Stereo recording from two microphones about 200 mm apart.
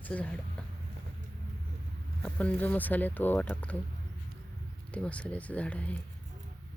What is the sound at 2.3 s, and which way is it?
Speech, 10° left (ahead or behind).